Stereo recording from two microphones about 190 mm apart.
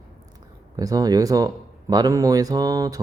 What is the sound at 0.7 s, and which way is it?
Speech, 20° right (ahead or behind).